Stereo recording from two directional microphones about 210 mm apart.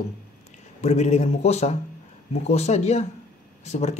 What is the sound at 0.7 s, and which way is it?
A man's voice, 30° left (ahead or behind).